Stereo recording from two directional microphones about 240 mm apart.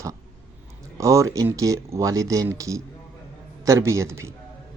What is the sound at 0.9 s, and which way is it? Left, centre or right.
Speech, centre.